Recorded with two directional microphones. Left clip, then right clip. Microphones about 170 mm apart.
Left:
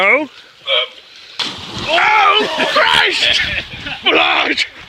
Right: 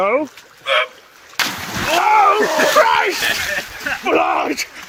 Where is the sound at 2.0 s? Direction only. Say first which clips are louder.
Even; centre (ahead or behind).